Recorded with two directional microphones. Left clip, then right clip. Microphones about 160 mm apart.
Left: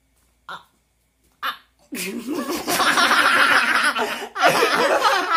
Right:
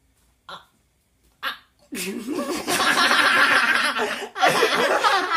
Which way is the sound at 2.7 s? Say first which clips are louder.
Left 2 dB; 15° left (ahead or behind).